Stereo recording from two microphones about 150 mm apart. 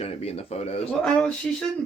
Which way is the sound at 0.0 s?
45° left (ahead or behind).